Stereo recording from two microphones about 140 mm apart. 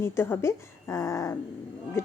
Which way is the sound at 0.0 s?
20° left (ahead or behind).